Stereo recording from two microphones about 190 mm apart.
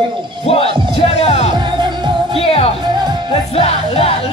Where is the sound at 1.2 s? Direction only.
35° left (ahead or behind).